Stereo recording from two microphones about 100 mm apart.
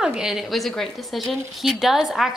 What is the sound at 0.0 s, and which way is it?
Speech, 5° right (ahead or behind).